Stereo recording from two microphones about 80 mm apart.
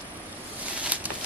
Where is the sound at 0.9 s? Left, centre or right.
Centre.